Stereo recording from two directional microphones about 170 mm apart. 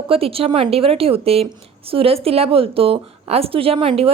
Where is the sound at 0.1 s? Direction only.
35° right (ahead or behind).